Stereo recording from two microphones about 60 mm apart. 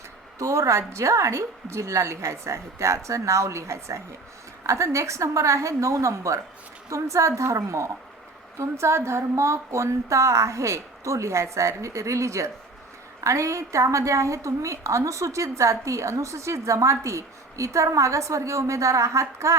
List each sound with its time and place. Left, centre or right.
0.3 s a woman's voice: right